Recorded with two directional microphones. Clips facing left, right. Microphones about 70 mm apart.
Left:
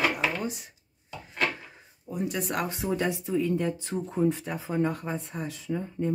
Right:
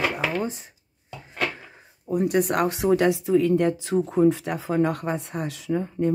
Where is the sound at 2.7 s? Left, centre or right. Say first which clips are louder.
Right 8 dB; right.